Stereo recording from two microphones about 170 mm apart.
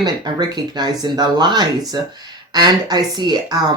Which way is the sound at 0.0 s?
25° right (ahead or behind).